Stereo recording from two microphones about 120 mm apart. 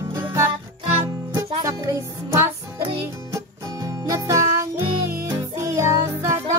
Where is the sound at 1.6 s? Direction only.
20° right (ahead or behind).